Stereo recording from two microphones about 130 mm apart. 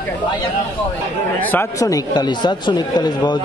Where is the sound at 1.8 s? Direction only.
30° left (ahead or behind).